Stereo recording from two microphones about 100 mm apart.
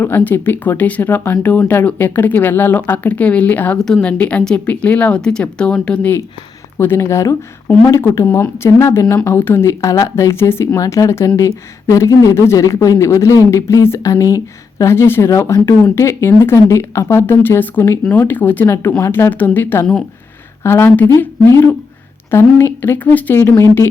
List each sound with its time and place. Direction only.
0.0 s speech: 20° left (ahead or behind)
3.8 s speech: 5° left (ahead or behind); by 23.9 s 30° left (ahead or behind)